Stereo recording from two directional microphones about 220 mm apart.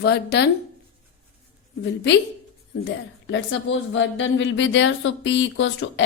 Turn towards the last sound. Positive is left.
turn(degrees=60)  # may be behind; listen again after turning